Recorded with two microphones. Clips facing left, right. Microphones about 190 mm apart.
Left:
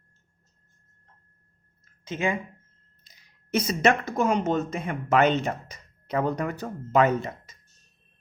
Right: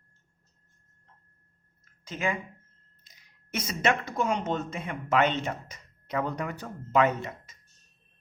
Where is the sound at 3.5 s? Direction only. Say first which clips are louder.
Left 5 dB; 35° left (ahead or behind).